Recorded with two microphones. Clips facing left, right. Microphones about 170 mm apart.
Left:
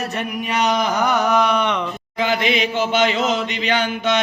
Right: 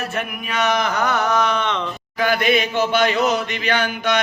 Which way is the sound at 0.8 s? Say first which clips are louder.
Left 2 dB; 15° left (ahead or behind).